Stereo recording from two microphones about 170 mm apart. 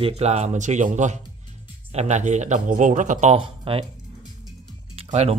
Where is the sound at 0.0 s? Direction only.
40° right (ahead or behind).